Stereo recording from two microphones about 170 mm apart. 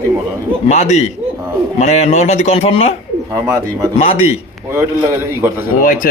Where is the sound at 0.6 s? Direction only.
40° left (ahead or behind).